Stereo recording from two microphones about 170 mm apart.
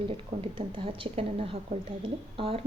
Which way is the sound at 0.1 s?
35° right (ahead or behind).